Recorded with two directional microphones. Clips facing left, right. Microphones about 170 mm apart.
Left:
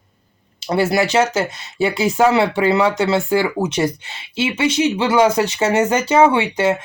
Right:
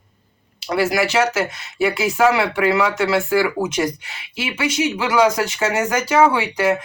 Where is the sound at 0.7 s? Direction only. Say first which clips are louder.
Left 2 dB; 30° left (ahead or behind).